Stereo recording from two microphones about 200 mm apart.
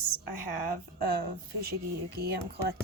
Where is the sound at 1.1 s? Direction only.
50° right (ahead or behind).